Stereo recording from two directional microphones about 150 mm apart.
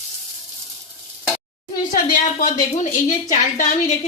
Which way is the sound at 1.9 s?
65° left (ahead or behind).